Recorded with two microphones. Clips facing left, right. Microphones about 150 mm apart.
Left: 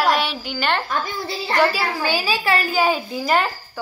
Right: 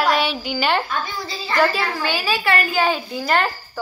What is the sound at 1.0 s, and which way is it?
Speech, 60° left (ahead or behind).